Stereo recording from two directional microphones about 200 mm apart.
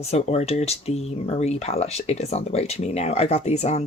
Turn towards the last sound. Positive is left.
turn(degrees=35)  # may be behind; listen again after turning